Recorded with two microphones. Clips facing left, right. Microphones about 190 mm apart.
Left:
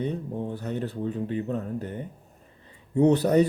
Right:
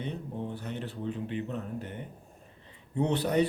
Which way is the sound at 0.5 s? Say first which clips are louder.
Left 6 dB; 40° left (ahead or behind).